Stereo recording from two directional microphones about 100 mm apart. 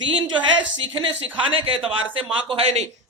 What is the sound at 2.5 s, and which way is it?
Speech, 85° right.